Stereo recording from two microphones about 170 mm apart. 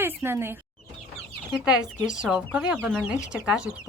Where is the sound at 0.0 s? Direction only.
15° right (ahead or behind).